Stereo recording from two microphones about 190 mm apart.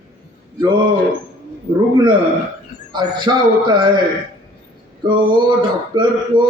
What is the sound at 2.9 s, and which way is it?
A man's voice, 25° right (ahead or behind).